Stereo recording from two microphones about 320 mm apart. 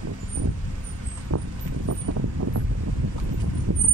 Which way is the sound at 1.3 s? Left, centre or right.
Right.